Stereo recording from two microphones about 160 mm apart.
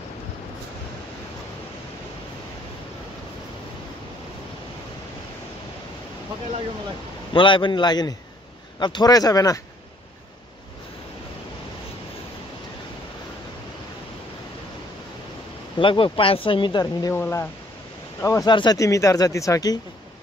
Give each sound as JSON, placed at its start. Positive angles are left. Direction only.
{"t": 7.3, "sound": "speech", "side_deg": 30}
{"t": 15.8, "sound": "speech", "side_deg": 30}
{"t": 17.1, "sound": "speech", "side_deg": 15}